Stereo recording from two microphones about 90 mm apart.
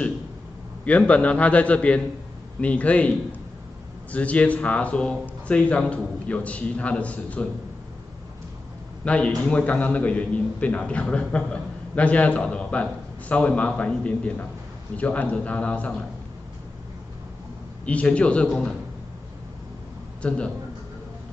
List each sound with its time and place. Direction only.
0.8 s a man's voice: 15° left (ahead or behind)
9.0 s a man's voice: 15° left (ahead or behind)
17.8 s a man's voice: 15° left (ahead or behind)
20.2 s a man's voice: 10° left (ahead or behind)